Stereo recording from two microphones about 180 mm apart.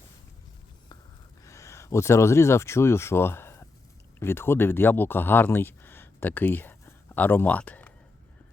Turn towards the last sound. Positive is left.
turn(degrees=10)  # may be behind; listen again after turning